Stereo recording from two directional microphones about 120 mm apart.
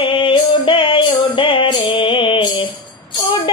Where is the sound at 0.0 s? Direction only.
45° left (ahead or behind).